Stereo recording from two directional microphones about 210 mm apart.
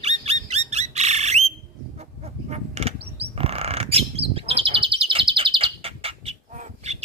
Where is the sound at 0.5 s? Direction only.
30° right (ahead or behind).